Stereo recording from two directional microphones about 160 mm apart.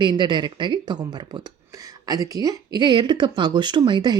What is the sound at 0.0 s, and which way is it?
Speech, 30° right (ahead or behind).